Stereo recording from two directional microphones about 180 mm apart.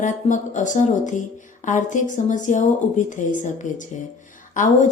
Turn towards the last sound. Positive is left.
turn(degrees=45)  # may be behind; listen again after turning